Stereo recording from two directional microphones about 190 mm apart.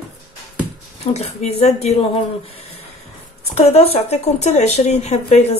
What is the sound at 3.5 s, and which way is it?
Speech, 35° left (ahead or behind).